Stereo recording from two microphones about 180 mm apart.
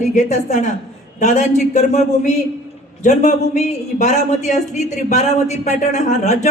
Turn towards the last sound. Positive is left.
turn(degrees=40)  # may be behind; listen again after turning